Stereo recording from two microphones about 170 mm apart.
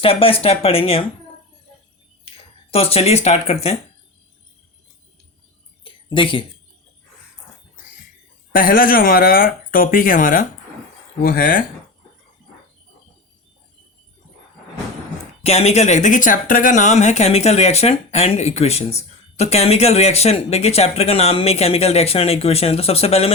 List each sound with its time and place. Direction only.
0.0 s speech: 35° left (ahead or behind)
2.2 s a sound: 35° left (ahead or behind)
3.2 s speech: 40° left (ahead or behind)
5.8 s a sound: 30° left (ahead or behind)
8.5 s speech: 55° left (ahead or behind)
15.4 s speech: 40° left (ahead or behind)